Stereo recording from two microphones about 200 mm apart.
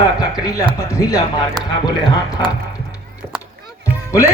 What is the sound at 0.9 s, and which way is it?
Music, 15° left (ahead or behind).